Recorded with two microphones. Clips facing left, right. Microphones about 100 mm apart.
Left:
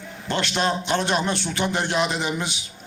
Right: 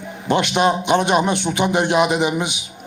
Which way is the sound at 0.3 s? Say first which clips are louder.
Right 7 dB; 15° right (ahead or behind).